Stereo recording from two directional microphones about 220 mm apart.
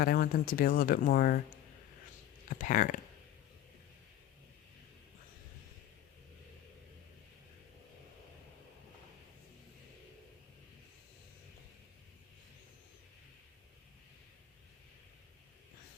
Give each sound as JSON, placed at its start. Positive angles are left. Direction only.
{"t": 0.0, "sound": "speech", "side_deg": 45}
{"t": 2.6, "sound": "speech", "side_deg": 35}